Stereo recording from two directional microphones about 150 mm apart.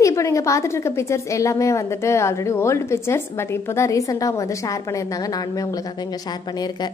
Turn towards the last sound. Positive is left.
turn(degrees=25)  # may be behind; listen again after turning